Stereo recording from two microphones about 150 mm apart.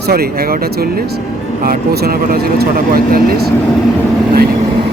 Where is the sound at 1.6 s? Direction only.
80° right.